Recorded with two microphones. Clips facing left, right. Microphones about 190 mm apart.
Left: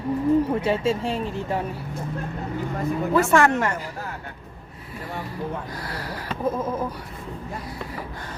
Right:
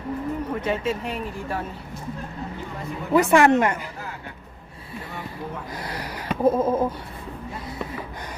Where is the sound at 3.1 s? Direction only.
15° right (ahead or behind).